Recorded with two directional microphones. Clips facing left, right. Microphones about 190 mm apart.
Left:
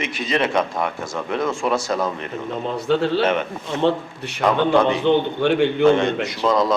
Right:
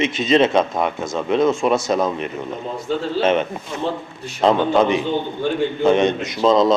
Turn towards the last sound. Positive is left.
turn(degrees=-20)  # may be behind; listen again after turning